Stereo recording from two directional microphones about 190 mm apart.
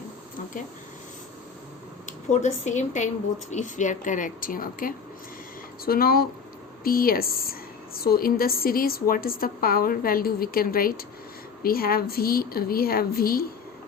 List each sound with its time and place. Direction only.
2.0 s a woman's voice: 40° left (ahead or behind)